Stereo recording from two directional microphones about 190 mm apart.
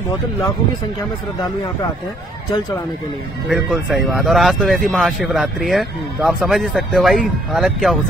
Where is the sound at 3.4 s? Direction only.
Centre (ahead or behind).